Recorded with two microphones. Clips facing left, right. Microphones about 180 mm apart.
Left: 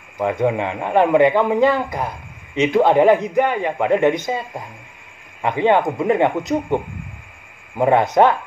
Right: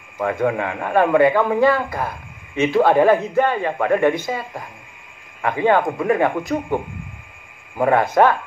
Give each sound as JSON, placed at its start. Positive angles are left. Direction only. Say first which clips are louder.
{"t": 0.2, "sound": "speech", "louder": "left 1 dB", "side_deg": 20}